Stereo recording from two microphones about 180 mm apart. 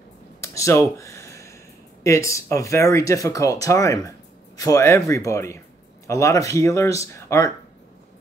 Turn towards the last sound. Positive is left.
turn(degrees=15)  # may be behind; listen again after turning